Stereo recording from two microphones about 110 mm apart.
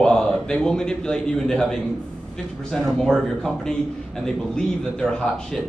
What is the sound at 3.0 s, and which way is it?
A man's voice, 5° left (ahead or behind).